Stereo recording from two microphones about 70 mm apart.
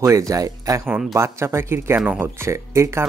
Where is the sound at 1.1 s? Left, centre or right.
Right.